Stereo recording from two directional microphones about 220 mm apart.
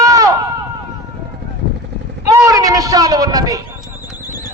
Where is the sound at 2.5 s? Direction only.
15° right (ahead or behind).